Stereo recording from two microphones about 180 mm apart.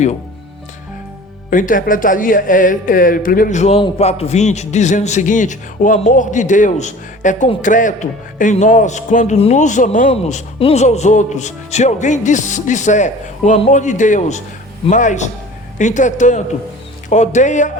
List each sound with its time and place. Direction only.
1.5 s speech: 50° left (ahead or behind)